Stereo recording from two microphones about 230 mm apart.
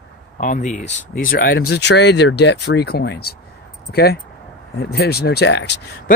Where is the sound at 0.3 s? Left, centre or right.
Left.